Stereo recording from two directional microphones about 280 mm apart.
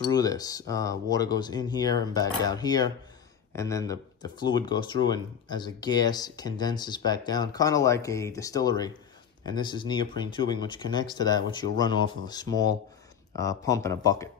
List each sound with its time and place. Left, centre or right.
0.1 s speech: centre